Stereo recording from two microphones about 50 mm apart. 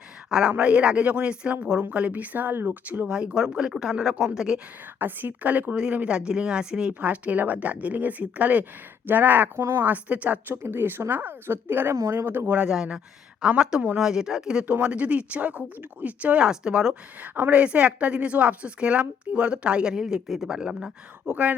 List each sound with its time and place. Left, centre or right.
0.3 s a woman's voice: centre; by 2.5 s right
2.5 s a woman's voice: right
3.1 s a woman's voice: centre
4.9 s speech: right
5.7 s a woman's voice: centre
7.0 s speech: right
9.6 s a woman's voice: right
9.8 s speech: right
10.5 s a woman's voice: right
11.9 s a woman's voice: right
12.6 s a woman's voice: centre
14.8 s a woman's voice: right
16.4 s a woman's voice: centre
16.9 s a woman's voice: right